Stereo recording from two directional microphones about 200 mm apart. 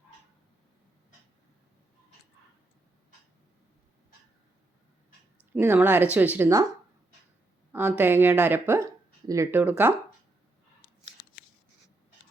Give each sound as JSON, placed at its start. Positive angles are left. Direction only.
{"t": 5.5, "sound": "speech", "side_deg": -10}
{"t": 7.7, "sound": "speech", "side_deg": -10}